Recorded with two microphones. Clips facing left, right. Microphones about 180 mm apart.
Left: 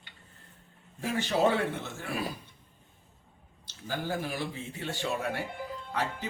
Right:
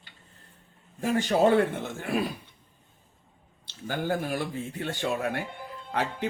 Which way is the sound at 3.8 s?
55° right (ahead or behind).